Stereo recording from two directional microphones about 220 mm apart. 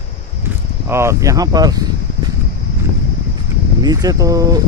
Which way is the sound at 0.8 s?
10° right (ahead or behind).